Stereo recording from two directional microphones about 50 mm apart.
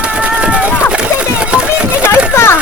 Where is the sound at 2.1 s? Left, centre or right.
Left.